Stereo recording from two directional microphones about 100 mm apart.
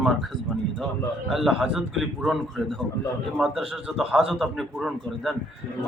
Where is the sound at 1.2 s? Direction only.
5° right (ahead or behind).